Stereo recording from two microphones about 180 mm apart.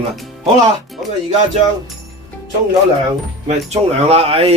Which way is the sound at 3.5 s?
35° right (ahead or behind).